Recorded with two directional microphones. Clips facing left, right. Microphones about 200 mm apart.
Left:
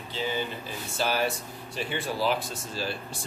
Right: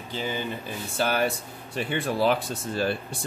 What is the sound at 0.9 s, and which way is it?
Speech, 55° right (ahead or behind).